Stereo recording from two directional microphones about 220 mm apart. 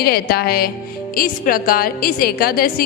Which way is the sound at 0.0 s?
45° left (ahead or behind).